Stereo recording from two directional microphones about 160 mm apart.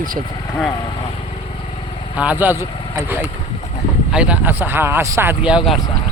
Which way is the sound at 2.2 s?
10° right (ahead or behind).